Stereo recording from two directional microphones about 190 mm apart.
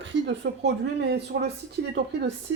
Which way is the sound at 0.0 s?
70° right (ahead or behind).